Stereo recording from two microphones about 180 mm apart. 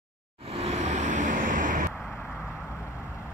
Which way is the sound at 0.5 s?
35° right (ahead or behind).